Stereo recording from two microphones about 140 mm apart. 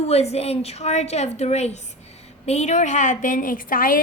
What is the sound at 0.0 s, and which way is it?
A woman's voice, 50° left (ahead or behind).